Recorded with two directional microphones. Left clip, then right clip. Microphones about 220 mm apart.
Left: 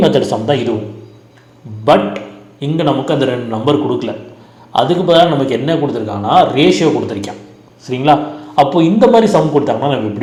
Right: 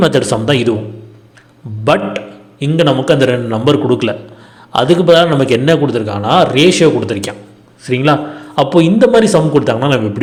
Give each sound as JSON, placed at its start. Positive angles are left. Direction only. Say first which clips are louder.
{"t": 0.0, "sound": "a man's voice", "louder": "even", "side_deg": -50}
{"t": 2.7, "sound": "a man's voice", "louder": "right 3 dB", "side_deg": -50}